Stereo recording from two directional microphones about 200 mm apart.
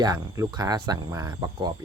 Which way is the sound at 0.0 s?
20° right (ahead or behind).